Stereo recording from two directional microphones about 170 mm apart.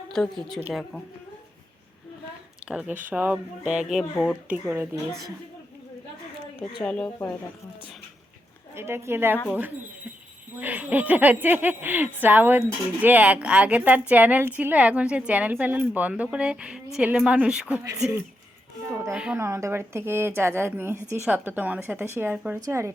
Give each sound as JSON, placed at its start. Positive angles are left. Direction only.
{"t": 0.1, "sound": "speech", "side_deg": 5}
{"t": 2.6, "sound": "speech", "side_deg": -5}
{"t": 6.8, "sound": "speech", "side_deg": 5}
{"t": 8.7, "sound": "speech", "side_deg": -15}
{"t": 18.9, "sound": "speech", "side_deg": -10}